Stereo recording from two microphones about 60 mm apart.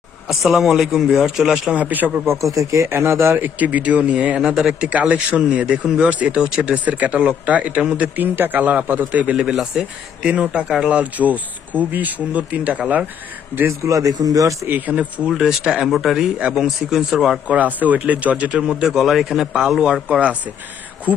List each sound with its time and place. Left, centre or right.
0.3 s a man's voice: centre
1.7 s speech: right
2.2 s speech: right
2.5 s speech: right
2.9 s speech: right
3.4 s speech: right
4.4 s speech: centre
9.5 s speech: centre; by 12.8 s right
13.7 s speech: right
14.7 s speech: right
15.3 s a man's voice: centre
17.5 s speech: right
18.5 s speech: centre